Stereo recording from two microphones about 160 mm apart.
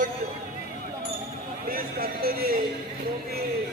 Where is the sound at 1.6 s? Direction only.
65° right (ahead or behind).